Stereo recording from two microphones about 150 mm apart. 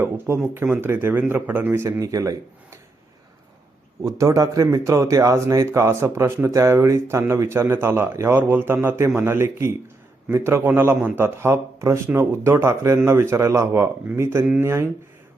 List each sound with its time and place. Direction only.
0.5 s a man's voice: 10° right (ahead or behind)
4.0 s a man's voice: 20° right (ahead or behind)